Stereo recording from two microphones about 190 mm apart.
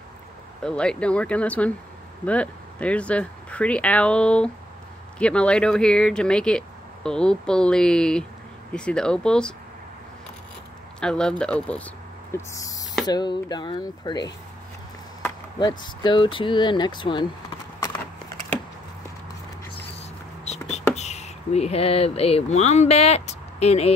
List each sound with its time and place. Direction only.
0.7 s speech: 5° left (ahead or behind)
11.0 s speech: 5° left (ahead or behind); by 14.3 s 20° left (ahead or behind)
15.8 s speech: 25° left (ahead or behind)
17.7 s a sound: 15° left (ahead or behind)
20.0 s a sound: 35° left (ahead or behind)
20.9 s speech: 35° left (ahead or behind)